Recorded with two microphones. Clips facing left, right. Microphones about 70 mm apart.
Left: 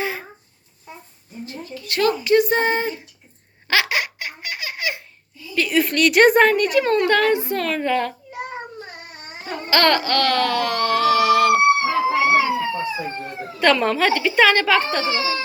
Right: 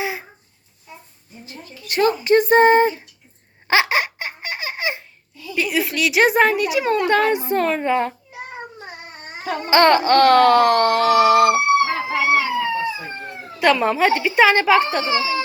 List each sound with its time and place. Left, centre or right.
0.0 s a sound: centre
1.9 s babbling: right
3.7 s baby laughter: right
5.5 s a woman's voice: centre
7.0 s a woman's voice: centre
9.6 s babbling: right
11.9 s dog: right
12.3 s a sound: centre
13.6 s speech: centre